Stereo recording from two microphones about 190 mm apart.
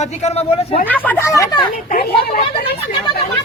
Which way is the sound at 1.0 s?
15° left (ahead or behind).